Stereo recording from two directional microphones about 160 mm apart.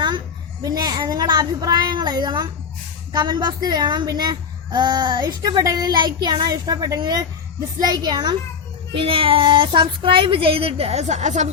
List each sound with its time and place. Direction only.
0.6 s a child's voice: 25° right (ahead or behind); by 11.4 s 45° right (ahead or behind)